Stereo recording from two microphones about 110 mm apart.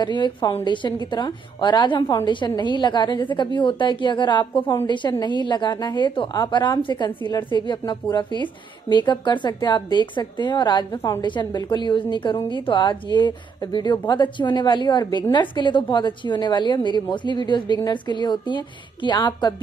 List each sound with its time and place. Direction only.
0.0 s a woman's voice: 45° left (ahead or behind)